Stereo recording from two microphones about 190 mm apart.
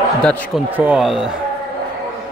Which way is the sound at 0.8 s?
5° right (ahead or behind).